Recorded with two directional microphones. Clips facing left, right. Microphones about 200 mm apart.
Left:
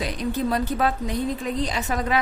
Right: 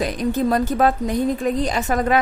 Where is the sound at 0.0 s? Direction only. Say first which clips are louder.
Right 5 dB; 45° right (ahead or behind).